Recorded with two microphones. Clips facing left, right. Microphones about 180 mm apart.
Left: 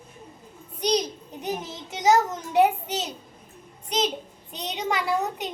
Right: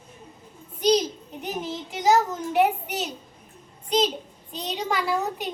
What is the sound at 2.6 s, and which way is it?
Speech, 20° left (ahead or behind).